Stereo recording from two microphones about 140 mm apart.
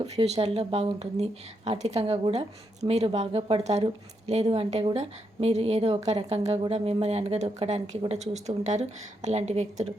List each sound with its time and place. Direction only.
0.0 s a woman's voice: 50° right (ahead or behind)